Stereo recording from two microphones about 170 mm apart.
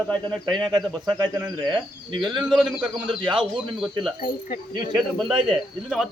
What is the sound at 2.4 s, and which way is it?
Speech, 5° right (ahead or behind).